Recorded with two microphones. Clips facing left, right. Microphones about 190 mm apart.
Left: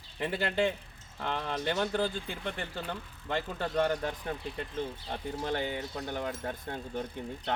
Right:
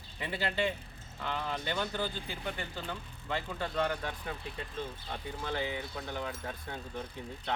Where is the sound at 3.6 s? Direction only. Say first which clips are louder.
Left 4 dB; 40° left (ahead or behind).